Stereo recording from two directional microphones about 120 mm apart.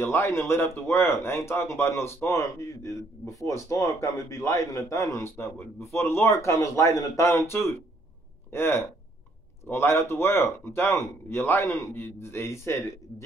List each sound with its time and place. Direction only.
0.0 s speech: 20° left (ahead or behind)